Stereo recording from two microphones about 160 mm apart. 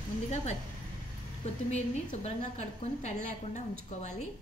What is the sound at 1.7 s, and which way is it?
A woman's voice, 45° left (ahead or behind).